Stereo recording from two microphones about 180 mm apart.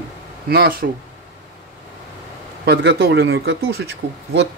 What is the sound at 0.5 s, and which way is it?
Speech, 60° right (ahead or behind).